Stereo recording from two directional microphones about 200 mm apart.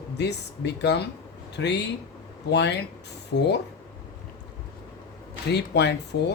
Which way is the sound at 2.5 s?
60° left (ahead or behind).